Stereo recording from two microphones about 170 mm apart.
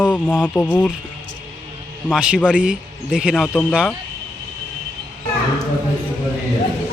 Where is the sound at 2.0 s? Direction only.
5° right (ahead or behind).